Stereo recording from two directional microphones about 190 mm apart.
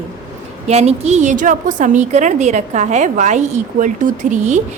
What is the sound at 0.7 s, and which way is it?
A woman's voice, 35° right (ahead or behind).